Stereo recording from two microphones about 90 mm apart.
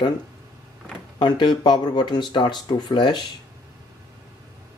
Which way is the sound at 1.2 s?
60° left (ahead or behind).